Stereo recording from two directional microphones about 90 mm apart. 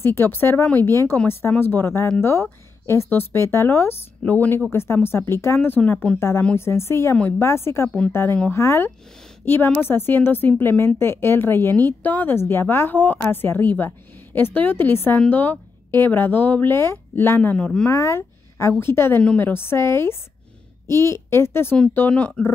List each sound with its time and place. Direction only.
0.0 s a woman's voice: 25° left (ahead or behind)
17.4 s speech: 15° left (ahead or behind)
17.8 s a woman's voice: 30° left (ahead or behind); by 22.4 s 15° left (ahead or behind)